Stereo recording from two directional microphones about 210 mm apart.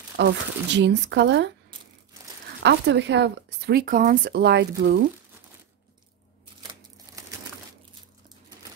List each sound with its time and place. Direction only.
0.2 s speech: 55° right (ahead or behind)
2.6 s speech: 55° right (ahead or behind)
6.7 s a sound: 15° right (ahead or behind)